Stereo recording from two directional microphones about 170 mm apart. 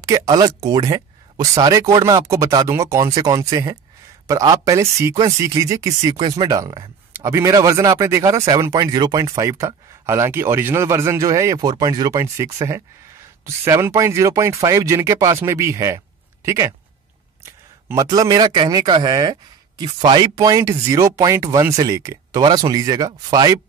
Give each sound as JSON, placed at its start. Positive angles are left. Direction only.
{"t": 0.0, "sound": "speech", "side_deg": -20}
{"t": 17.8, "sound": "speech", "side_deg": -20}